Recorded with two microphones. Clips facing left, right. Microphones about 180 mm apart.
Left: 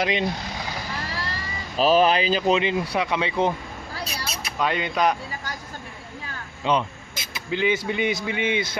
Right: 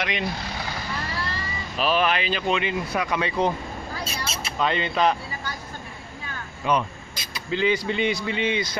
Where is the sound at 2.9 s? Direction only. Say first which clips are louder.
Left 1 dB; 15° left (ahead or behind).